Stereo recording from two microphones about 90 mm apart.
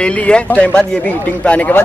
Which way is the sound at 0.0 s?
15° left (ahead or behind).